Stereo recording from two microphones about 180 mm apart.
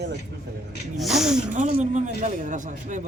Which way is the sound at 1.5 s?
45° right (ahead or behind).